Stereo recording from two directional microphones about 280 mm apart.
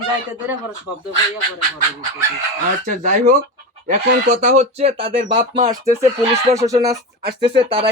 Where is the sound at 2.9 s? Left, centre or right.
Right.